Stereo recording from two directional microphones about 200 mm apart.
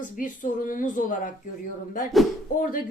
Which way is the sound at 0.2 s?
40° left (ahead or behind).